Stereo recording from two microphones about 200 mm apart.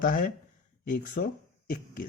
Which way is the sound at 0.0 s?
45° left (ahead or behind).